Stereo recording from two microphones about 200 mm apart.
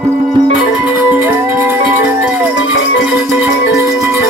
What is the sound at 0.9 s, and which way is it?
Music, 10° right (ahead or behind).